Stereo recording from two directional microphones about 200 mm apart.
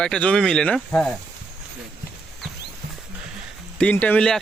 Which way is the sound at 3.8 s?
5° left (ahead or behind).